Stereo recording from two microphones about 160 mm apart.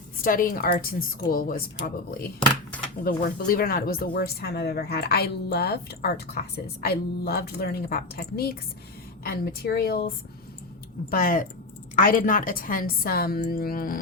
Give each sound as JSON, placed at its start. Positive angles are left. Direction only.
{"t": 0.2, "sound": "a woman's voice", "side_deg": 60}
{"t": 6.8, "sound": "speech", "side_deg": 80}
{"t": 11.1, "sound": "a woman's voice", "side_deg": 60}